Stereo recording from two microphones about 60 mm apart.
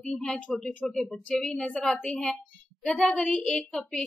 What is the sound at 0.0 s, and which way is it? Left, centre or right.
A woman's voice, centre.